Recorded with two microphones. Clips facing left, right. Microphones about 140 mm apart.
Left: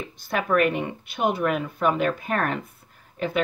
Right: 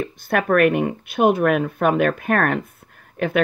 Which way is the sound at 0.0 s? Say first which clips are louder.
Right 6 dB; 55° right (ahead or behind).